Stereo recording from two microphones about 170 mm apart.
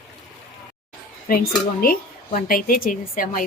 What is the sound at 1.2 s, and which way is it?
A woman's voice, 60° left (ahead or behind).